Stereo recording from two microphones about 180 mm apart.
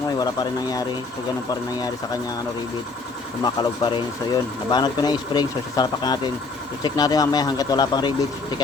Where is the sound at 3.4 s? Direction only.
25° left (ahead or behind).